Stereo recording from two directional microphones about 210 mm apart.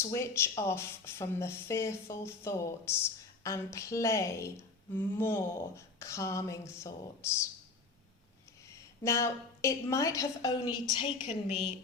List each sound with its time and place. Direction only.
0.0 s speech: 15° left (ahead or behind)
8.7 s speech: 15° left (ahead or behind)